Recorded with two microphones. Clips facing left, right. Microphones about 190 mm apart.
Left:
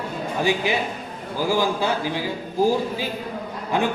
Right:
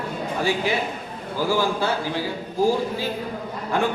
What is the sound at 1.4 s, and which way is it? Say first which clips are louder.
Speech: left 1 dB; 15° left (ahead or behind).